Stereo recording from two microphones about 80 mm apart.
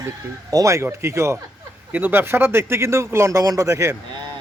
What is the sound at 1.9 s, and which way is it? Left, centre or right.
A man's voice, right.